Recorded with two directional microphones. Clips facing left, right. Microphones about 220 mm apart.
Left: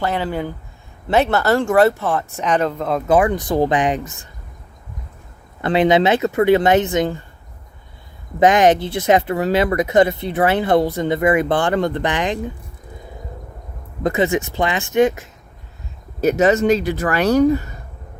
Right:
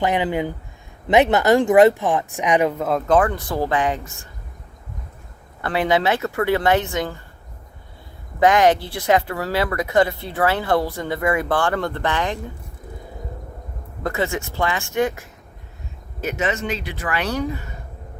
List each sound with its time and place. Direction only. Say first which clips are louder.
0.0 s speech: right 1 dB; 15° right (ahead or behind)
3.1 s speech: left 4 dB; 15° left (ahead or behind)
5.6 s speech: left 5 dB; 20° left (ahead or behind)
8.4 s speech: left 2 dB; 20° left (ahead or behind)
14.0 s speech: left 6 dB; 20° left (ahead or behind)
16.2 s speech: left 10 dB; 40° left (ahead or behind)